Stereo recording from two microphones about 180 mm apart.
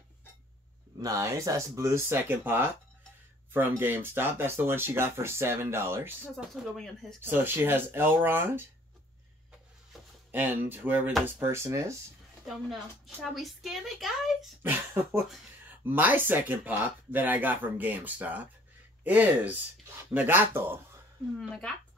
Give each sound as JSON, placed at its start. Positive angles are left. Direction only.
{"t": 0.9, "sound": "speech", "side_deg": -20}
{"t": 6.3, "sound": "a woman's voice", "side_deg": 0}
{"t": 7.2, "sound": "speech", "side_deg": -10}
{"t": 10.3, "sound": "speech", "side_deg": -10}
{"t": 12.4, "sound": "a woman's voice", "side_deg": 0}
{"t": 15.8, "sound": "speech", "side_deg": -10}
{"t": 21.4, "sound": "a woman's voice", "side_deg": 5}